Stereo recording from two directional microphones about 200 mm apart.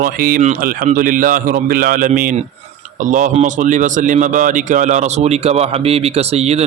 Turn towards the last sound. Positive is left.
turn(degrees=-30)  # may be behind; listen again after turning